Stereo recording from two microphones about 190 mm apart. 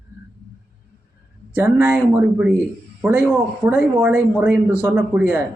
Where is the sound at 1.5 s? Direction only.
10° right (ahead or behind).